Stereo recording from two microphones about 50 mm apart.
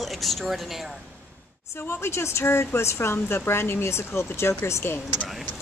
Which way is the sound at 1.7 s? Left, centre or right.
Left.